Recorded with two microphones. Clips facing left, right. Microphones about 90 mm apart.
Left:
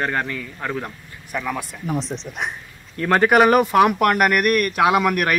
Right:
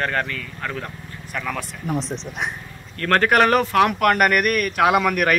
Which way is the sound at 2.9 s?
10° left (ahead or behind).